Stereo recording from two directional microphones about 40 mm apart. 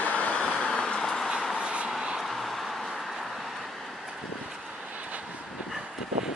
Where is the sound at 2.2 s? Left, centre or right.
Centre.